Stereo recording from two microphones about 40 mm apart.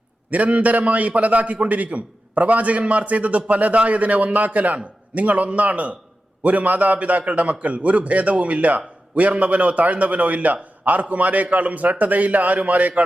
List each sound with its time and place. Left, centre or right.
0.3 s a man's voice: right